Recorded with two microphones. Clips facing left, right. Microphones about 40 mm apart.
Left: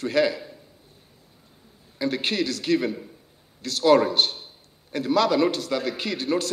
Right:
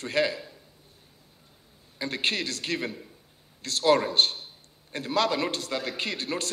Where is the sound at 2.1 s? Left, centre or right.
Right.